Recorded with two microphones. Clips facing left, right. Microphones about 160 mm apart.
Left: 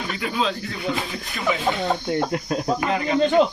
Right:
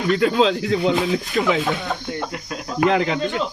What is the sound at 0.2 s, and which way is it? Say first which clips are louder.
Speech: right 5 dB; 80° right.